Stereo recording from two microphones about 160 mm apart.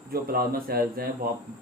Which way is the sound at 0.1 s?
70° right (ahead or behind).